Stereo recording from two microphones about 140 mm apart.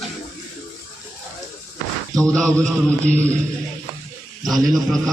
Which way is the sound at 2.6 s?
10° left (ahead or behind).